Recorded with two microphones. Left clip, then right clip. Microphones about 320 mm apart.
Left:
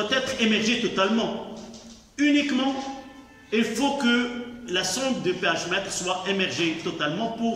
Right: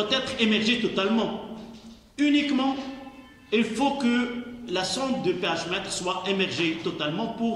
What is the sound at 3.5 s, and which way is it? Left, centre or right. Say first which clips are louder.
A man's voice: even; centre.